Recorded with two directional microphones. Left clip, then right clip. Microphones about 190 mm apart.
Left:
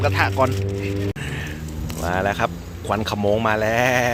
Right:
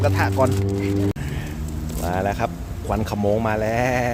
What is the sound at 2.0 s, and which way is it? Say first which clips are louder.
Speech: left 2 dB; 5° right (ahead or behind).